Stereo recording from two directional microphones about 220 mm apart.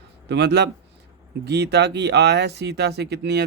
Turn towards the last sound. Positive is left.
turn(degrees=-50)  # may be behind; listen again after turning